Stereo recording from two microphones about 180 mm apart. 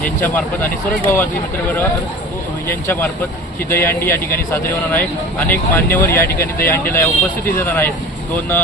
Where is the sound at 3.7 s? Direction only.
10° left (ahead or behind).